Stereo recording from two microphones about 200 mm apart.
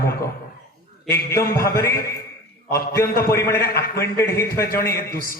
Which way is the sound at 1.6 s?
15° left (ahead or behind).